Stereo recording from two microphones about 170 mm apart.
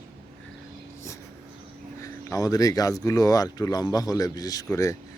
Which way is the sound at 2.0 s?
20° left (ahead or behind).